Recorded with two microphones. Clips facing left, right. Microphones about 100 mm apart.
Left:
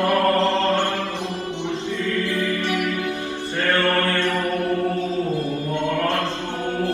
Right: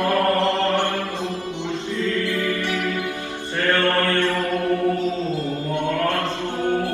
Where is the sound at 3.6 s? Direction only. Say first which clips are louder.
Right 1 dB; 25° right (ahead or behind).